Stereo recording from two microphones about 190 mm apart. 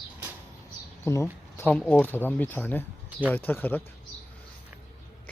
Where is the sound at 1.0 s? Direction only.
15° left (ahead or behind).